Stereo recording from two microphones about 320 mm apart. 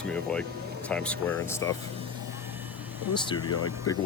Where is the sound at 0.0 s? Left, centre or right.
Centre.